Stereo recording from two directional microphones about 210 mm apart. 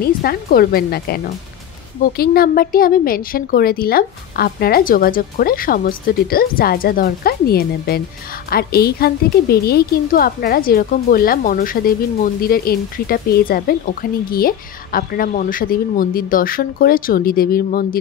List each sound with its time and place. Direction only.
0.0 s a woman's voice: 45° left (ahead or behind)